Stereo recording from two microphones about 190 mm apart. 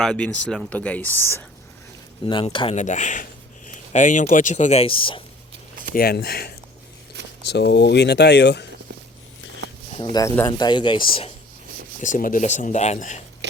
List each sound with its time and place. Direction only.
0.0 s speech: 5° left (ahead or behind)
2.2 s speech: 25° left (ahead or behind)
2.7 s speech: 40° left (ahead or behind)
5.9 s speech: 55° left (ahead or behind)
10.0 s speech: 20° left (ahead or behind)
11.9 s speech: 45° left (ahead or behind)
13.4 s a sound: 65° right (ahead or behind)